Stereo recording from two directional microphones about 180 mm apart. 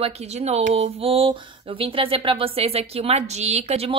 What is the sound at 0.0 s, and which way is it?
A woman's voice, 35° right (ahead or behind).